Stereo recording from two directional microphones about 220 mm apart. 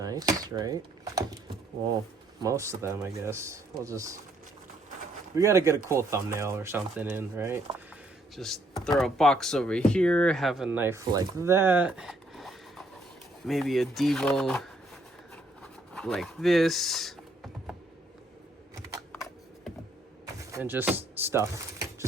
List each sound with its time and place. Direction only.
0.0 s speech: 15° right (ahead or behind)
2.4 s speech: 15° right (ahead or behind)
5.4 s speech: 10° right (ahead or behind)
8.4 s speech: centre (ahead or behind)
15.6 s a sound: centre (ahead or behind)
19.1 s a sound: centre (ahead or behind)
20.2 s speech: 15° right (ahead or behind)